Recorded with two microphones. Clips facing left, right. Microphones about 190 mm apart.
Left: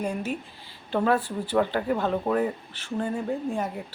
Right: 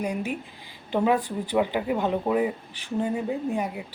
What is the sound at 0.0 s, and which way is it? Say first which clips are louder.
Speech: right 1 dB; 15° right (ahead or behind).